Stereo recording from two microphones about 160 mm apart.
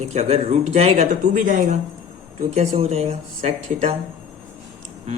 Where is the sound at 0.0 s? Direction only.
45° right (ahead or behind).